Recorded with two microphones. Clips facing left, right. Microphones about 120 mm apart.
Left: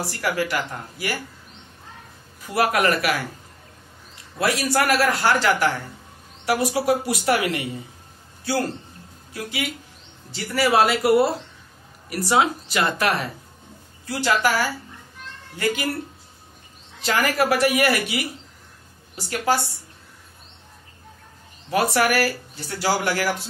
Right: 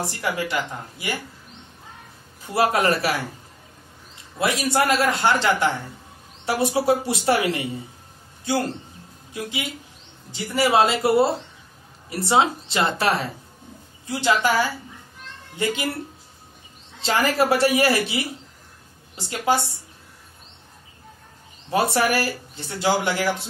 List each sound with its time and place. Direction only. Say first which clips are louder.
0.0 s speech: left 1 dB; 20° right (ahead or behind)
2.4 s speech: even; 25° right (ahead or behind)
4.4 s speech: even; 20° right (ahead or behind)
15.5 s speech: left 1 dB; 25° right (ahead or behind)
17.0 s speech: right 1 dB; 25° right (ahead or behind)
21.6 s speech: even; 25° right (ahead or behind)